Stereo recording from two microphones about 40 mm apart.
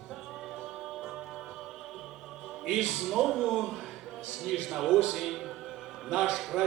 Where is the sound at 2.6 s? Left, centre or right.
Centre.